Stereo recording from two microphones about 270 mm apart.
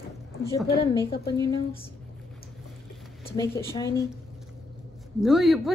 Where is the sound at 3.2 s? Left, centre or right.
Left.